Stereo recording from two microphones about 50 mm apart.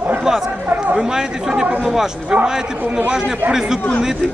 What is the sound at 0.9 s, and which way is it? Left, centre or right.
Speech, centre.